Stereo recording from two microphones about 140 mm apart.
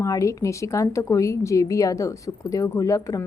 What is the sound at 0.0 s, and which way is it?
A woman's voice, 25° left (ahead or behind).